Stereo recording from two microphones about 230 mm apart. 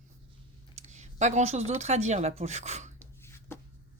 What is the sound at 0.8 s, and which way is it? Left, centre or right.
Speech, right.